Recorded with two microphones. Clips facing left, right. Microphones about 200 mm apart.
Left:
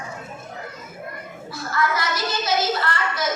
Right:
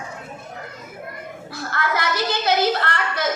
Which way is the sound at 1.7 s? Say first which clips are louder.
Even; 60° right (ahead or behind).